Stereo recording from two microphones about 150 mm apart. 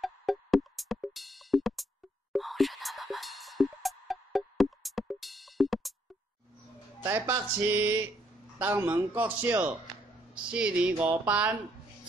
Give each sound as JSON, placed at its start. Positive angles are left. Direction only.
{"t": 0.0, "sound": "music", "side_deg": 0}
{"t": 7.0, "sound": "a man's voice", "side_deg": -20}